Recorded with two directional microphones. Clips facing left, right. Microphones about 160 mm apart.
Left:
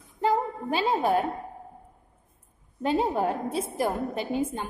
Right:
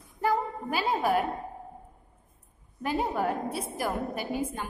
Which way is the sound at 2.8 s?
25° left (ahead or behind).